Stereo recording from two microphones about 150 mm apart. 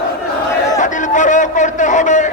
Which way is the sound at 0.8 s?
55° left (ahead or behind).